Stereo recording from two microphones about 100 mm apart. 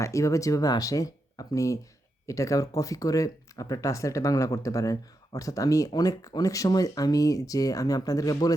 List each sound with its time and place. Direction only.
0.0 s speech: 30° left (ahead or behind)